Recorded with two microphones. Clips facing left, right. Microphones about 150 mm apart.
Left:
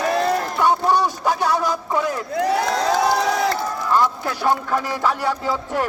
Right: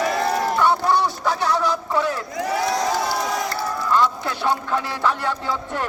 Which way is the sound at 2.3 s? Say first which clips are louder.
Left 3 dB; 70° left (ahead or behind).